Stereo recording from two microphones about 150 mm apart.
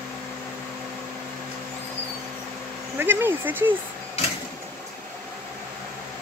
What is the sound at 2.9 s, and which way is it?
Speech, 15° right (ahead or behind).